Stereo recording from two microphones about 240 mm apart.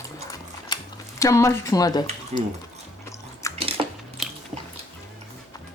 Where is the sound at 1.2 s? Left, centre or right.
Centre.